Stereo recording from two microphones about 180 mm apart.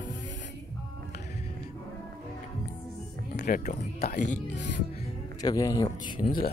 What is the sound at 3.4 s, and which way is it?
Speech, 55° left (ahead or behind).